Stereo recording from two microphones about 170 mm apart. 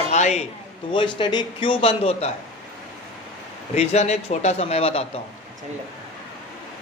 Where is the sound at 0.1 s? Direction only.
45° left (ahead or behind).